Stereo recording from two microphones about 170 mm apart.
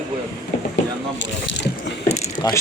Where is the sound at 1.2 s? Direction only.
90° left.